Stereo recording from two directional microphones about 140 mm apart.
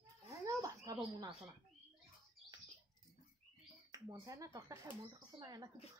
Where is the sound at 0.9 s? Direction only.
25° right (ahead or behind).